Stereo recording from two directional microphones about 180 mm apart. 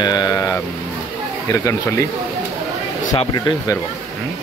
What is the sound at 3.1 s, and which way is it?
Speech, 25° left (ahead or behind).